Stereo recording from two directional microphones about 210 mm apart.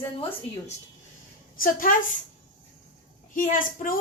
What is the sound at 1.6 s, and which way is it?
Speech, 40° left (ahead or behind).